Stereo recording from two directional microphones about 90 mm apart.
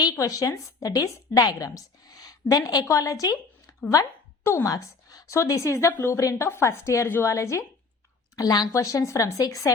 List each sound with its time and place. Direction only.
0.2 s a woman's voice: 35° left (ahead or behind)
8.4 s a woman's voice: 45° left (ahead or behind)